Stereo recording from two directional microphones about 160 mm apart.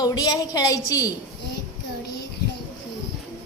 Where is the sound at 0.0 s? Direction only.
25° left (ahead or behind).